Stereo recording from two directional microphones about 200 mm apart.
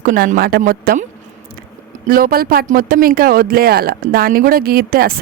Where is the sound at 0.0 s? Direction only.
45° right (ahead or behind).